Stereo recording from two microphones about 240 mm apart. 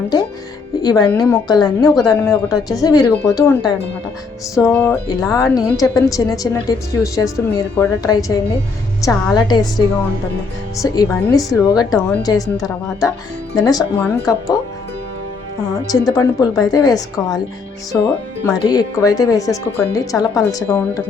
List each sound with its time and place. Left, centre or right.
0.8 s speech: centre
10.9 s speech: centre
15.9 s speech: centre